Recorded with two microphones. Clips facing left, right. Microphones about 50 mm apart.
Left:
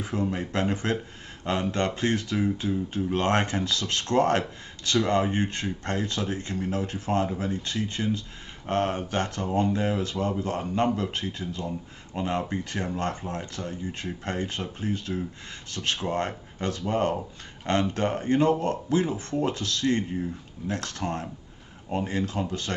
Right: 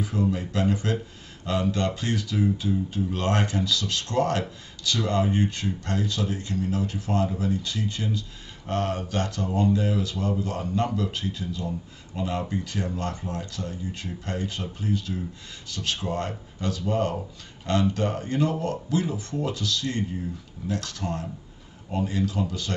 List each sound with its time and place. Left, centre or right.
0.0 s speech: left